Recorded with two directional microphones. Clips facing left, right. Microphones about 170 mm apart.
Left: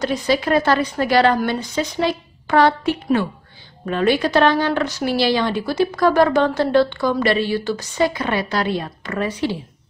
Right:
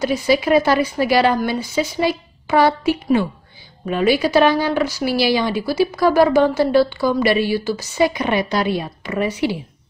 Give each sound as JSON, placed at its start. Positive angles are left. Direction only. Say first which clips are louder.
{"t": 0.0, "sound": "a woman's voice", "louder": "right 2 dB", "side_deg": -10}